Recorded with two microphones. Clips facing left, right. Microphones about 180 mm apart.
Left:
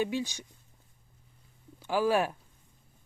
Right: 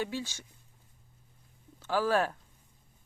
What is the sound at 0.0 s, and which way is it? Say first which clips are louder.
Speech: left 4 dB; 15° left (ahead or behind).